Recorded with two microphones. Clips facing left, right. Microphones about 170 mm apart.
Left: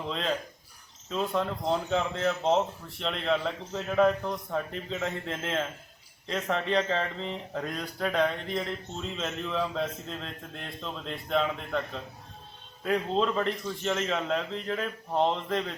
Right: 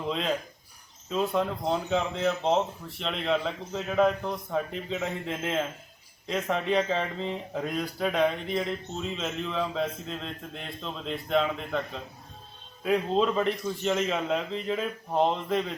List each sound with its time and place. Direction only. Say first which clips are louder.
0.1 s a man's voice: right 2 dB; 5° right (ahead or behind)